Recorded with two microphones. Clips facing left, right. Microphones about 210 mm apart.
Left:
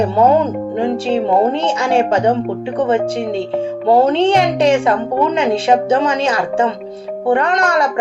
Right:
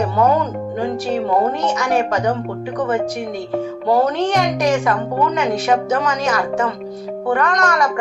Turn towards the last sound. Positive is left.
turn(degrees=30)  # may be behind; listen again after turning